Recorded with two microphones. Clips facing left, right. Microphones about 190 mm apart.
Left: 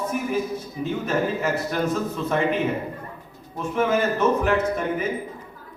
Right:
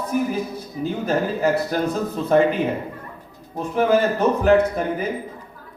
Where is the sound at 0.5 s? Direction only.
35° right (ahead or behind).